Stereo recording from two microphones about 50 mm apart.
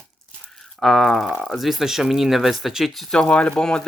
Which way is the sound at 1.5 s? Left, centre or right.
Centre.